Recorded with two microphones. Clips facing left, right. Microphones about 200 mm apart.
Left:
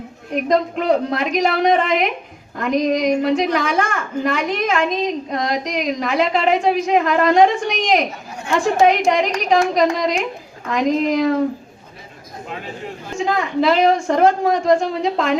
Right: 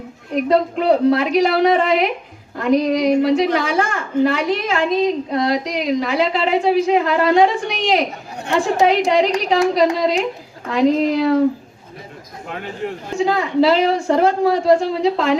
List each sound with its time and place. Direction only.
0.5 s a woman's voice: 35° right (ahead or behind)
13.1 s a woman's voice: 35° right (ahead or behind)